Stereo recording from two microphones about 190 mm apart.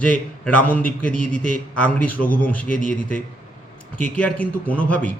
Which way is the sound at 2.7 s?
45° left (ahead or behind).